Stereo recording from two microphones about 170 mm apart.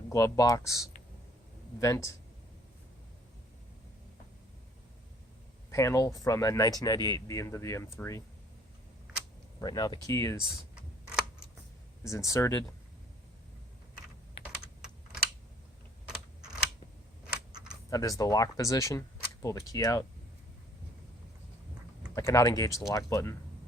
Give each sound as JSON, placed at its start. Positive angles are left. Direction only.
{"t": 0.1, "sound": "speech", "side_deg": 20}
{"t": 5.7, "sound": "speech", "side_deg": 15}
{"t": 9.6, "sound": "speech", "side_deg": 25}
{"t": 12.0, "sound": "speech", "side_deg": 20}
{"t": 17.9, "sound": "speech", "side_deg": 20}
{"t": 22.1, "sound": "speech", "side_deg": 20}